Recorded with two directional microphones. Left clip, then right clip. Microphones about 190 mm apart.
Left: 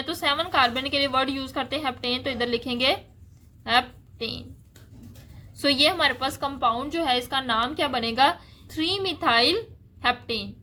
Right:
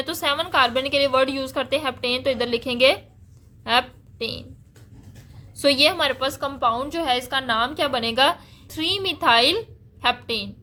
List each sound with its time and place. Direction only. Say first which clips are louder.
0.0 s a woman's voice: right 2 dB; 20° right (ahead or behind)
5.6 s a woman's voice: right 3 dB; 15° right (ahead or behind)